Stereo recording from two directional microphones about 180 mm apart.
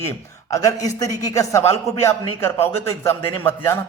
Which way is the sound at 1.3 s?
15° left (ahead or behind).